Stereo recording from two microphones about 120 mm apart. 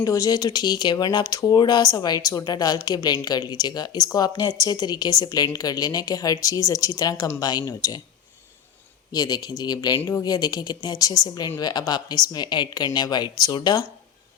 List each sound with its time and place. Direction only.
0.0 s speech: 30° left (ahead or behind)
9.1 s speech: 30° left (ahead or behind)